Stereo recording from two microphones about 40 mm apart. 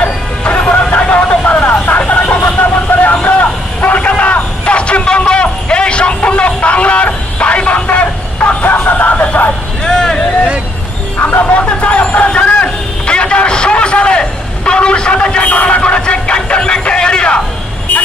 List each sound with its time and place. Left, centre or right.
0.0 s music: left
1.0 s vehicle: left
1.4 s vehicle: left
2.4 s vehicle: left
4.2 s a sound: left
9.8 s vehicle: centre
11.1 s music: left
11.4 s vehicle: left
12.3 s a sound: left